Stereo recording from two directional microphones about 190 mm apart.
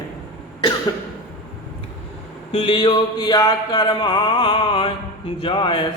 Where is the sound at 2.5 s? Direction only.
25° left (ahead or behind).